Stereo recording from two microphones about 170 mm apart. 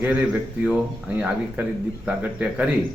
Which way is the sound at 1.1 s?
10° right (ahead or behind).